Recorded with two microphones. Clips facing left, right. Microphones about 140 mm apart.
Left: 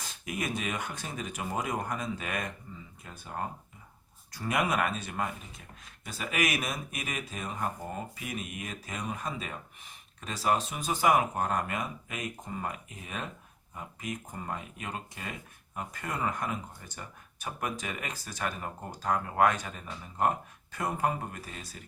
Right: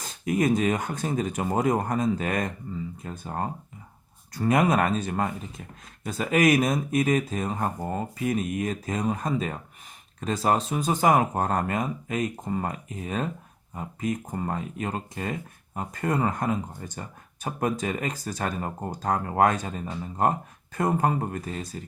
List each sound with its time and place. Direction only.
0.0 s speech: 40° right (ahead or behind)
14.3 s speech: 45° right (ahead or behind)